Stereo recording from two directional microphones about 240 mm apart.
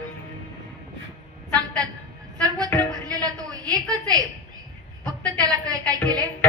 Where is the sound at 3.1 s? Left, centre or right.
Centre.